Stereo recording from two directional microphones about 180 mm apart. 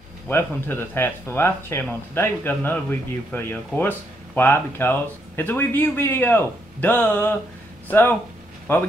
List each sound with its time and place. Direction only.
0.3 s speech: 10° left (ahead or behind)